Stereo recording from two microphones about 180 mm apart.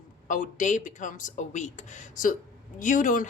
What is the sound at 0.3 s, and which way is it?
Speech, 45° left (ahead or behind).